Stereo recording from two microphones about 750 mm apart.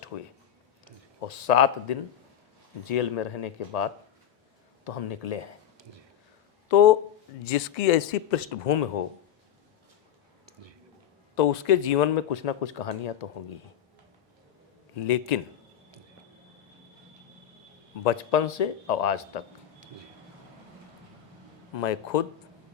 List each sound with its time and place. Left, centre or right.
0.1 s a man's voice: left
1.3 s a man's voice: left
6.7 s a man's voice: left
11.3 s a man's voice: left
14.9 s a man's voice: left
18.0 s a man's voice: left
21.8 s a man's voice: left